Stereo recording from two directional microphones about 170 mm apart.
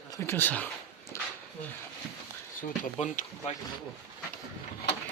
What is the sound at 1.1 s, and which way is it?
Dog, 15° left (ahead or behind).